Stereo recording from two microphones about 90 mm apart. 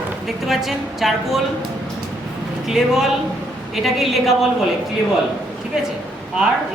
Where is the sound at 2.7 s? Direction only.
5° right (ahead or behind).